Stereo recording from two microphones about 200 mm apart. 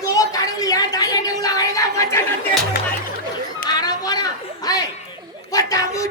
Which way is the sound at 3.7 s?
20° left (ahead or behind).